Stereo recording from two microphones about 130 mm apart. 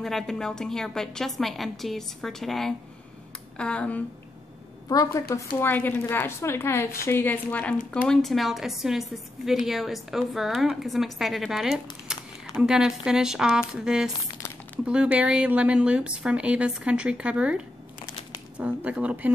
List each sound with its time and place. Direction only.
0.0 s a woman's voice: centre (ahead or behind)
4.8 s a woman's voice: 25° left (ahead or behind); by 19.3 s 10° right (ahead or behind)